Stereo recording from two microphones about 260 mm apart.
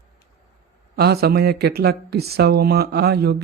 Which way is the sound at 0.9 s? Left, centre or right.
Right.